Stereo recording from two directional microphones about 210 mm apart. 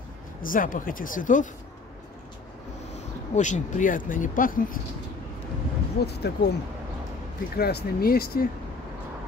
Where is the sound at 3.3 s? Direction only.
35° left (ahead or behind).